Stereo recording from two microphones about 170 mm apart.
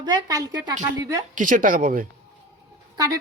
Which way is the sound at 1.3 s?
50° right (ahead or behind).